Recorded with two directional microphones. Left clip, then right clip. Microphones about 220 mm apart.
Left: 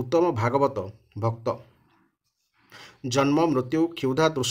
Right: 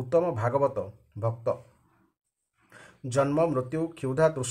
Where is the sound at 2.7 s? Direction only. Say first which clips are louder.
Left 2 dB; 40° left (ahead or behind).